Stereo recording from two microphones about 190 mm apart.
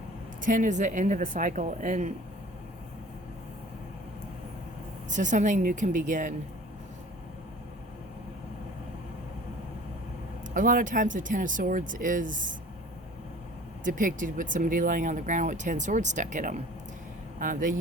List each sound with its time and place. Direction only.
0.4 s speech: 45° right (ahead or behind)
5.1 s speech: 40° right (ahead or behind)
10.5 s speech: 45° right (ahead or behind)
13.8 s speech: 45° right (ahead or behind)